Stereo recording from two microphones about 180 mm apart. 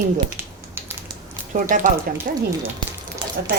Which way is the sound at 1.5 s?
45° right (ahead or behind).